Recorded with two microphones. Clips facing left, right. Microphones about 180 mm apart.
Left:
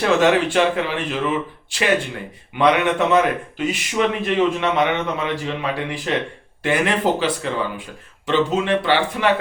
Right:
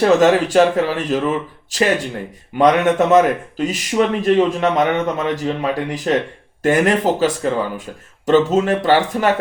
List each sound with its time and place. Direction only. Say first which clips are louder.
0.0 s speech: right 4 dB; 40° right (ahead or behind)